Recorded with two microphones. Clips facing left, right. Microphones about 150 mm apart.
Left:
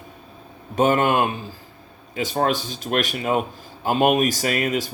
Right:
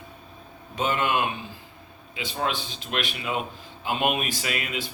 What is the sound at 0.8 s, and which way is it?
Speech, 45° left (ahead or behind).